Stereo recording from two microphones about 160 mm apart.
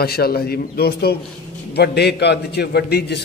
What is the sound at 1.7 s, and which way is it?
A man's voice, 90° left.